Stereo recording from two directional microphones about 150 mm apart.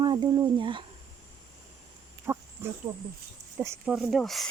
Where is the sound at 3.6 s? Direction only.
15° right (ahead or behind).